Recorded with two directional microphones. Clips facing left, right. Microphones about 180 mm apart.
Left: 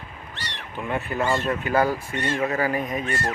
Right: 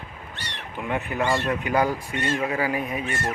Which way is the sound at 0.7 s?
15° right (ahead or behind).